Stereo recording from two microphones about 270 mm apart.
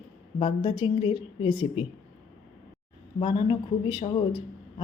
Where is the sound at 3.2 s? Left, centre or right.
Centre.